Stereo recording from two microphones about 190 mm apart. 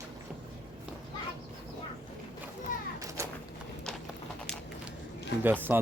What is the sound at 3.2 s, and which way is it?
Clip-clop, 15° right (ahead or behind).